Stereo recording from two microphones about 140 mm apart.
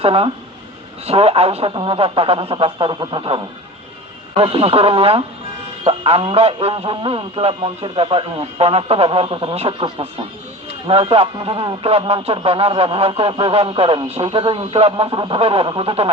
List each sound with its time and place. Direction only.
0.0 s speech: 40° right (ahead or behind)